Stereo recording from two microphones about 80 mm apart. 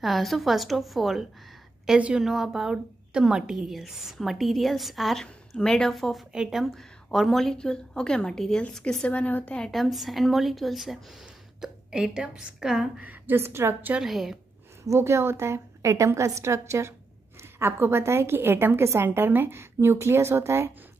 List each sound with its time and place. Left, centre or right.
0.0 s a woman's voice: centre
1.9 s a woman's voice: centre
9.7 s a woman's voice: centre
13.0 s a woman's voice: right
13.9 s a woman's voice: centre
14.9 s a woman's voice: right